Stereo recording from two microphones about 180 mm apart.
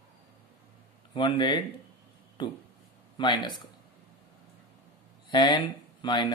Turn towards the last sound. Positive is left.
turn(degrees=25)  # may be behind; listen again after turning